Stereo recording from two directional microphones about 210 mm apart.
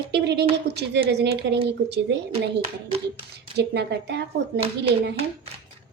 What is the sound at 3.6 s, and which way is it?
Speech, 55° right (ahead or behind).